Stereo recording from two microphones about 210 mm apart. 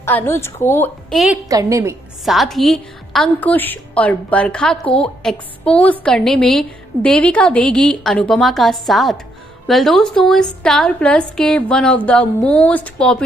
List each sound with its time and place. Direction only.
0.0 s a woman's voice: 10° left (ahead or behind)
1.1 s a woman's voice: centre (ahead or behind)
1.5 s a woman's voice: 15° right (ahead or behind)
2.2 s a woman's voice: centre (ahead or behind)